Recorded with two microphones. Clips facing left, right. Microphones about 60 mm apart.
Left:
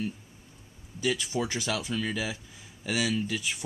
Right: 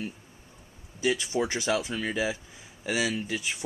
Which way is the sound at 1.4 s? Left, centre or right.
Right.